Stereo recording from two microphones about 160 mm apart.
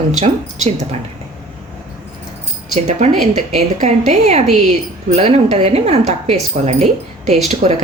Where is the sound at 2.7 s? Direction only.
45° right (ahead or behind).